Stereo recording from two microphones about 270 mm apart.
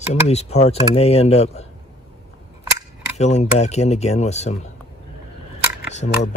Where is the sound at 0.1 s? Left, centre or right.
Left.